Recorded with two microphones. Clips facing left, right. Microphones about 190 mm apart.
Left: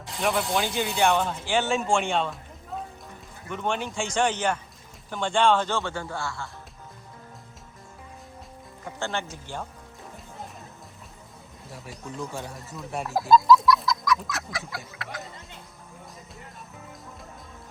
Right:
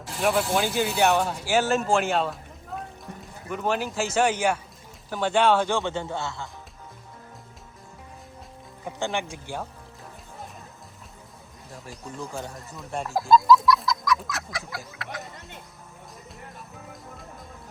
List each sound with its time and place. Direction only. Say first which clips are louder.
0.0 s speech: right 2 dB; 5° right (ahead or behind)
3.5 s speech: right 2 dB; 5° right (ahead or behind); by 6.5 s 20° right (ahead or behind)
8.8 s speech: right 2 dB; 15° right (ahead or behind)
11.7 s speech: left 1 dB; centre (ahead or behind)